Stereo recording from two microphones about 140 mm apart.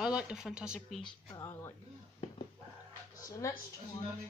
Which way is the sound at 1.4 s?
20° left (ahead or behind).